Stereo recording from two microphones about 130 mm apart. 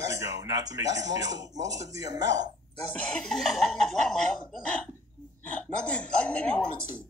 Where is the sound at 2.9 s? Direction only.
10° left (ahead or behind).